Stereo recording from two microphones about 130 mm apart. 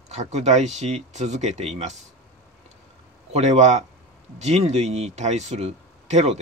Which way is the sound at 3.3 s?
60° right (ahead or behind).